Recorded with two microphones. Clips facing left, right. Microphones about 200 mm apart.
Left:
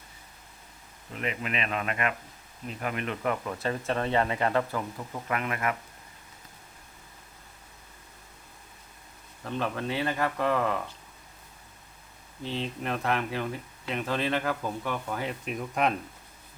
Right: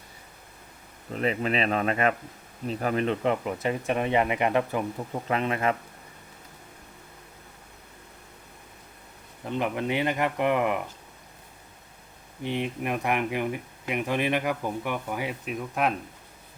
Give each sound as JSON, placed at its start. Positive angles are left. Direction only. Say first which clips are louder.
{"t": 1.1, "sound": "speech", "louder": "right 6 dB", "side_deg": -35}
{"t": 9.4, "sound": "speech", "louder": "right 3 dB", "side_deg": -15}
{"t": 12.4, "sound": "speech", "louder": "right 4 dB", "side_deg": -15}